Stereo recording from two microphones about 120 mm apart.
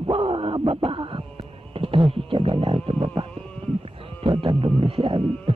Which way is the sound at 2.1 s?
50° right (ahead or behind).